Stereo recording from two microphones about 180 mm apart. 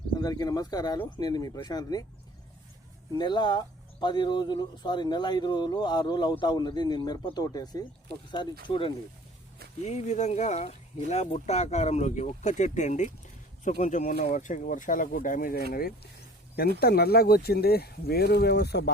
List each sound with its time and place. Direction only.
0.2 s speech: 20° left (ahead or behind)
3.2 s speech: 25° left (ahead or behind)
9.8 s speech: 40° left (ahead or behind)
16.8 s speech: 60° left (ahead or behind)